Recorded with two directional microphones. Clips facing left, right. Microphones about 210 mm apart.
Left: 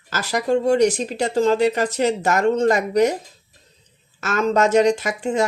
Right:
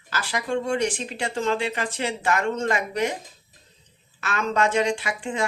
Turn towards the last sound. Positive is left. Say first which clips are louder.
# left 6 dB
turn(degrees=40)  # may be behind; listen again after turning